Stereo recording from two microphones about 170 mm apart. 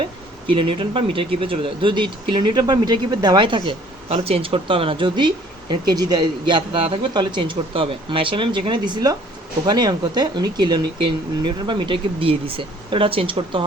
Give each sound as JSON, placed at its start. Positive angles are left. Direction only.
{"t": 0.0, "sound": "speech", "side_deg": -30}